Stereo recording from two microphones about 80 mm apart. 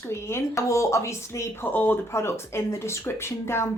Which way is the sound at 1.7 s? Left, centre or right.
Left.